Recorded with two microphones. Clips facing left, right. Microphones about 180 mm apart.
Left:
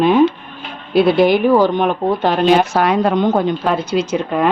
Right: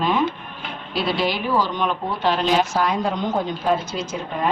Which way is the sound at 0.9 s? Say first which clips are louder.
Left 11 dB; 55° left (ahead or behind).